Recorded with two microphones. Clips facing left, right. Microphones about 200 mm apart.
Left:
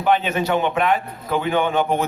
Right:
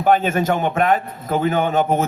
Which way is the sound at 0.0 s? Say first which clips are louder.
Right 3 dB; 45° right (ahead or behind).